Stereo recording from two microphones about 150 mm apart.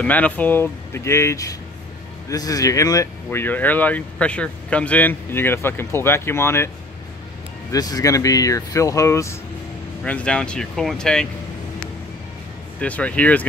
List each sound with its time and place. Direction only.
0.0 s speech: 10° left (ahead or behind)
7.7 s speech: 25° left (ahead or behind)
10.0 s speech: 10° left (ahead or behind)
12.8 s speech: 10° left (ahead or behind)